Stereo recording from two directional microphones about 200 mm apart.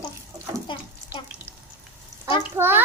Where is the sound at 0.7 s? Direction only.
25° left (ahead or behind).